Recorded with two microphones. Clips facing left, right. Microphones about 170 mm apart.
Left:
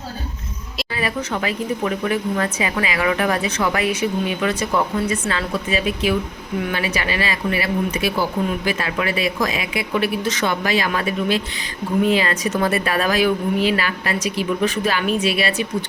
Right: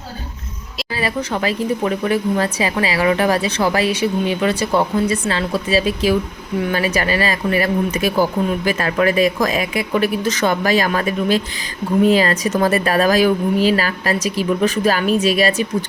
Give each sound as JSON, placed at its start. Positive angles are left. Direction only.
{"t": 0.9, "sound": "speech", "side_deg": -35}